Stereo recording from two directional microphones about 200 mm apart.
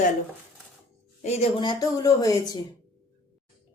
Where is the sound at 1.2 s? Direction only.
30° left (ahead or behind).